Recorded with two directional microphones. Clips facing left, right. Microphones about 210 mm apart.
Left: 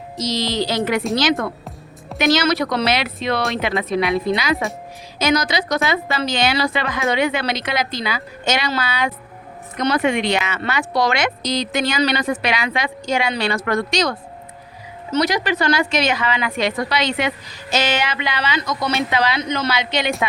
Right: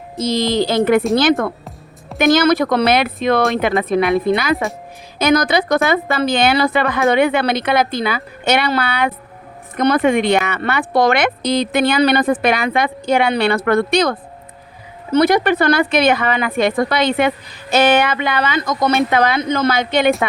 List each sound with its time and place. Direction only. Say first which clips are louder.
0.2 s a woman's voice: right 5 dB; 55° right (ahead or behind)
5.2 s a woman's voice: right 5 dB; 55° right (ahead or behind)